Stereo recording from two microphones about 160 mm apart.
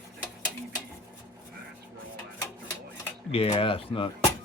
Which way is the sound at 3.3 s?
35° left (ahead or behind).